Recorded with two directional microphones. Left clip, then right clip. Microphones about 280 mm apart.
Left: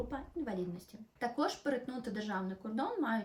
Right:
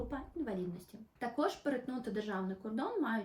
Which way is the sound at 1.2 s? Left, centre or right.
Centre.